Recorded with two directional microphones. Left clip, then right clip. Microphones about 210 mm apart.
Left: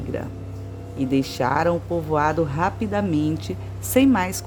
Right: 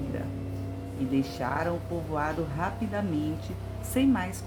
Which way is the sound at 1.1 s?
50° left (ahead or behind).